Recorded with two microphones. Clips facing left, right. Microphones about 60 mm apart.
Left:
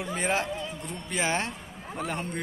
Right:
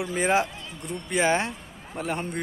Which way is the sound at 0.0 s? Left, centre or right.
Centre.